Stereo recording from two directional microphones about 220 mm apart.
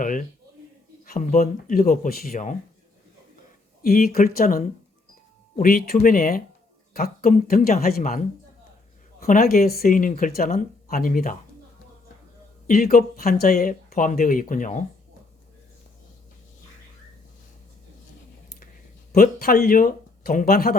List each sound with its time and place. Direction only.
0.0 s speech: 35° left (ahead or behind)
3.8 s speech: 40° left (ahead or behind)
9.2 s speech: 40° left (ahead or behind)
12.6 s speech: 40° left (ahead or behind)
19.1 s speech: 40° left (ahead or behind)